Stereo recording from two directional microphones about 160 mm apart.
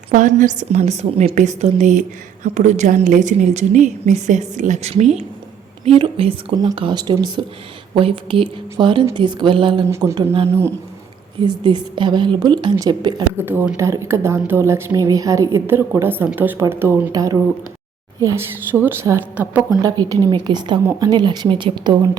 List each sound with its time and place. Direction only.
0.1 s a woman's voice: 50° right (ahead or behind); by 9.8 s 30° right (ahead or behind)
9.9 s a woman's voice: 20° right (ahead or behind)
11.3 s speech: 30° right (ahead or behind)
13.3 s a woman's voice: 15° right (ahead or behind)
18.7 s a woman's voice: 15° right (ahead or behind)
19.8 s speech: 20° right (ahead or behind)